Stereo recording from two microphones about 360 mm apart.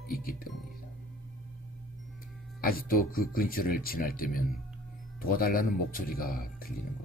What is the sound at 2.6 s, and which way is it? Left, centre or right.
Speech, left.